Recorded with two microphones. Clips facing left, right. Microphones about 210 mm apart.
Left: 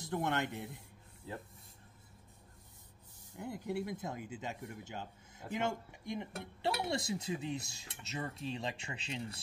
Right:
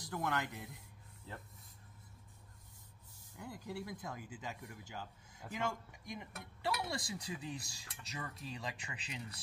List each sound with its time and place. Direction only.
0.0 s speech: 25° left (ahead or behind)
1.3 s speech: 10° left (ahead or behind)
3.3 s speech: 25° left (ahead or behind)